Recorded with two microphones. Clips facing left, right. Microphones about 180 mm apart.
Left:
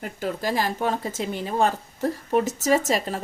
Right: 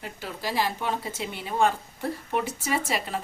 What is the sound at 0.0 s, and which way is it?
Speech, 45° left (ahead or behind).